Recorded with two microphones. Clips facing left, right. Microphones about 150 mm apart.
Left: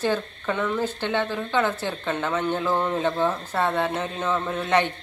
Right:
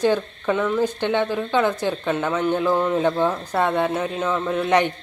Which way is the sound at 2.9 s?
15° right (ahead or behind).